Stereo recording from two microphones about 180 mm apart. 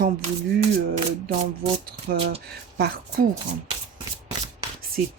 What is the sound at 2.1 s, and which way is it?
Speech, 55° right (ahead or behind).